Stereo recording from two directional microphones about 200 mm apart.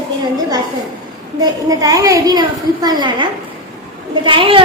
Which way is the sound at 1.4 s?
15° right (ahead or behind).